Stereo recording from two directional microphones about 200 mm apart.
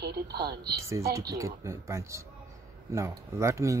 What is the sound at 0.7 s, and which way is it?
Speech, 15° right (ahead or behind).